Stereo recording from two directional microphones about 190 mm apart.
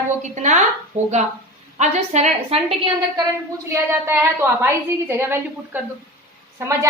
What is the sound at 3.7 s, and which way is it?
A woman's voice, 10° right (ahead or behind).